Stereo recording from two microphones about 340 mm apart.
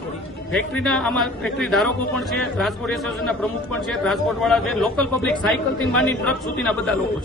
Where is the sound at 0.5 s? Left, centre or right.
Centre.